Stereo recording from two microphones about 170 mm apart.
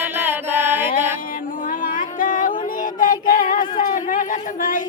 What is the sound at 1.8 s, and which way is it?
Music, 55° left (ahead or behind).